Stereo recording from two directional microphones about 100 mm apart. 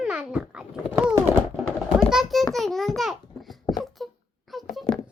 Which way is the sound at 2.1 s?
Centre (ahead or behind).